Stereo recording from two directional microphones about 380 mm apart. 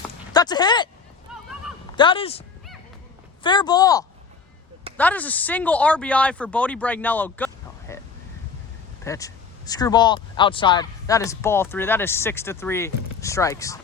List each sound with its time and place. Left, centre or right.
0.3 s speech: centre
1.3 s a sound: centre
2.0 s speech: centre
3.4 s speech: centre
9.0 s speech: centre